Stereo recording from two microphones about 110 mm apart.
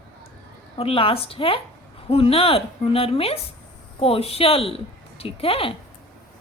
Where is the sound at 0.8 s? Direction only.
55° left (ahead or behind).